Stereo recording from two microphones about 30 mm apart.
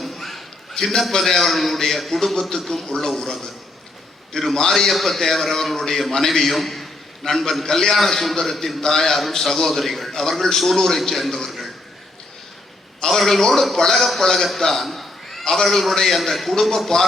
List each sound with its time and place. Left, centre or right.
0.0 s a sound: centre
1.2 s a man's voice: centre
4.3 s a man's voice: left
4.7 s a man's voice: centre
7.2 s a man's voice: left; by 11.5 s centre
13.1 s a man's voice: centre
14.5 s a sound: centre
15.6 s a man's voice: centre